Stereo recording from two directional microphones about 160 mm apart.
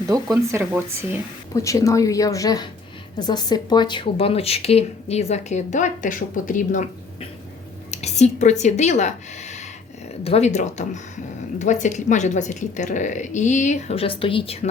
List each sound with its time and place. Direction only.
0.1 s speech: 20° right (ahead or behind)
0.6 s speech: 10° right (ahead or behind)
1.5 s a woman's voice: 20° left (ahead or behind); by 14.7 s 40° left (ahead or behind)